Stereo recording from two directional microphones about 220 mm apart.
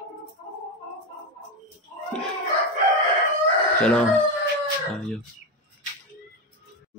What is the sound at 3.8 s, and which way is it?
Speech, 5° left (ahead or behind).